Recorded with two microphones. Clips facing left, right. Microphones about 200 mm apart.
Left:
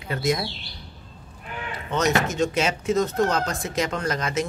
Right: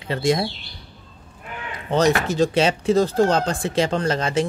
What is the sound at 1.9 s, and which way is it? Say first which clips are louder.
Speech: right 4 dB; 35° right (ahead or behind).